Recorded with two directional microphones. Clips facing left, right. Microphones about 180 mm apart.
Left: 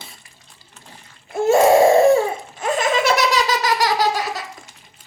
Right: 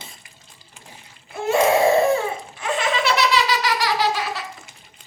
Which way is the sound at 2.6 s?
45° left (ahead or behind).